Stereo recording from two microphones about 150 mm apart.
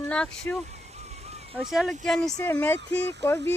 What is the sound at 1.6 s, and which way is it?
Speech, 5° right (ahead or behind).